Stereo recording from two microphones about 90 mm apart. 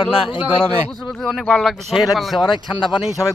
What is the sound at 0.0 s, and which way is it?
Speech, 75° left (ahead or behind).